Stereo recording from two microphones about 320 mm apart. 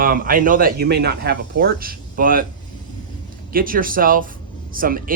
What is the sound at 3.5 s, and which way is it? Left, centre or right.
Speech, right.